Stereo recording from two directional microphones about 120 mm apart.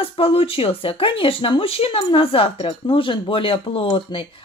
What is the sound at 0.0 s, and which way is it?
Speech, 50° left (ahead or behind).